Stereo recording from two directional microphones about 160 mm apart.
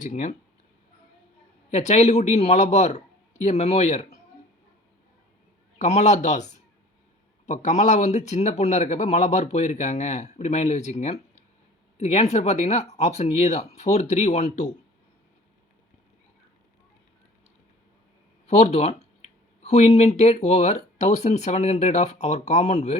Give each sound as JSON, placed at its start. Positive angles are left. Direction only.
{"t": 0.0, "sound": "speech", "side_deg": 50}
{"t": 1.7, "sound": "speech", "side_deg": 45}
{"t": 5.8, "sound": "speech", "side_deg": 45}
{"t": 7.4, "sound": "speech", "side_deg": 45}
{"t": 18.4, "sound": "speech", "side_deg": 45}